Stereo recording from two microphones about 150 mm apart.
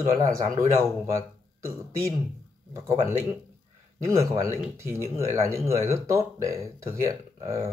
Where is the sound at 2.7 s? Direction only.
20° right (ahead or behind).